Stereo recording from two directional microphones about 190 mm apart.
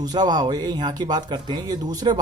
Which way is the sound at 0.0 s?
20° right (ahead or behind).